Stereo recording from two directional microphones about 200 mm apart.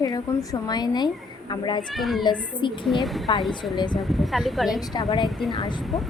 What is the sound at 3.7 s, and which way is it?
Speech, 20° left (ahead or behind).